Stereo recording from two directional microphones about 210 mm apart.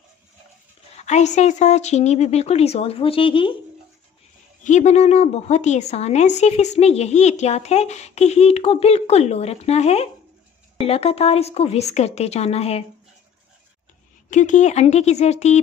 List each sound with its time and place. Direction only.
0.9 s a woman's voice: 35° left (ahead or behind)
4.6 s a woman's voice: 35° left (ahead or behind)
14.3 s a woman's voice: 35° left (ahead or behind)